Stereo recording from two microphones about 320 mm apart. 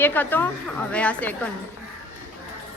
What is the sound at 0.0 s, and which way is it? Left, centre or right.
A woman's voice, centre.